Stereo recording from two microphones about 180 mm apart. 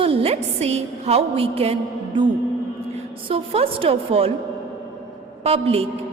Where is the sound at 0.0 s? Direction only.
35° right (ahead or behind).